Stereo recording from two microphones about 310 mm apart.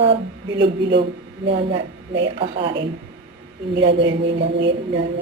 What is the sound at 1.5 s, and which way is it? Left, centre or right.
A woman's voice, centre.